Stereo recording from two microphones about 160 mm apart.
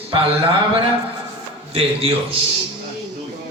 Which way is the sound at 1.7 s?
40° right (ahead or behind).